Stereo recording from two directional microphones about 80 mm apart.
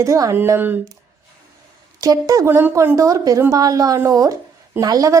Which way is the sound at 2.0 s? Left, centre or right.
Right.